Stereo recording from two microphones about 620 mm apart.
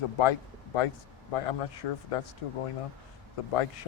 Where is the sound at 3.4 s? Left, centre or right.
Left.